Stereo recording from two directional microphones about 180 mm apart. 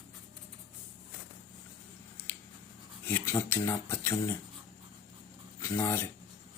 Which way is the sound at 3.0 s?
15° left (ahead or behind).